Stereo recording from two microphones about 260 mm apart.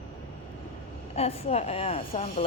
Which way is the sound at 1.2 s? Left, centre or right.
Left.